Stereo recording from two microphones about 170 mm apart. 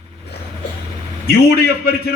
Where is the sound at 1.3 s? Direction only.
65° left (ahead or behind).